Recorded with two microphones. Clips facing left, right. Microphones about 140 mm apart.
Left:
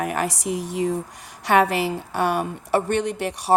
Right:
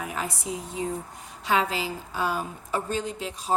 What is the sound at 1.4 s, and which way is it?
A woman's voice, 70° left (ahead or behind).